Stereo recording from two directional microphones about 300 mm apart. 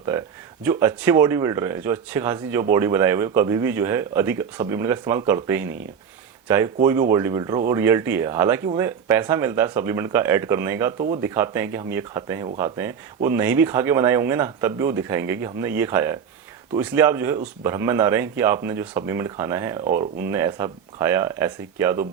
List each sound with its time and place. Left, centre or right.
0.0 s speech: centre